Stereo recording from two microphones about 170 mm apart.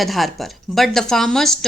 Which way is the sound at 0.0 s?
Centre (ahead or behind).